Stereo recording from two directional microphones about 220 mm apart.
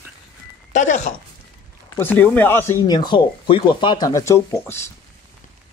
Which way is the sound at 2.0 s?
10° left (ahead or behind).